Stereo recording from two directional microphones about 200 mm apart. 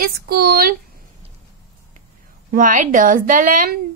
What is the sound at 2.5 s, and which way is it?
A woman's voice, 40° right (ahead or behind).